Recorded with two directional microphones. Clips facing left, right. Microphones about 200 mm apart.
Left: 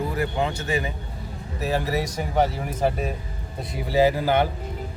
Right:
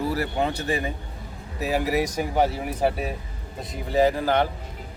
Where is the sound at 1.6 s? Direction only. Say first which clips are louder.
Right 1 dB; 15° right (ahead or behind).